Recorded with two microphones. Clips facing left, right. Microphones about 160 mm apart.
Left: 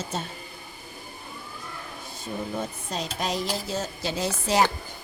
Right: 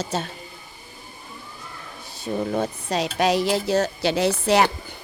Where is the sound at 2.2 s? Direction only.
70° right (ahead or behind).